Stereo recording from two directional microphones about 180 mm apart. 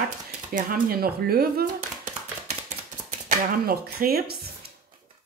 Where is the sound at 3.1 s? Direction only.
50° right (ahead or behind).